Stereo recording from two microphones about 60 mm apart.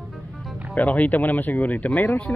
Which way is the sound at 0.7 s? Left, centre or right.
Left.